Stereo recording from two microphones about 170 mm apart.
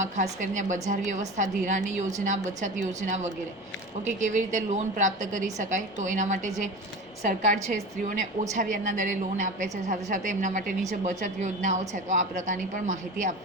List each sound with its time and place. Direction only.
0.0 s a woman's voice: 50° right (ahead or behind)